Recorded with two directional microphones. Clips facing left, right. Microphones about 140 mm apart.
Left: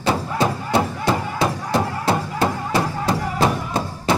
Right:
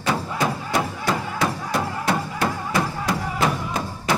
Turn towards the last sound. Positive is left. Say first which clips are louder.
# left 3 dB
turn(degrees=30)  # may be behind; listen again after turning